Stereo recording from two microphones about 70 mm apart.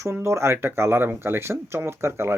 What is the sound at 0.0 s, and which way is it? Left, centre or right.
A man's voice, right.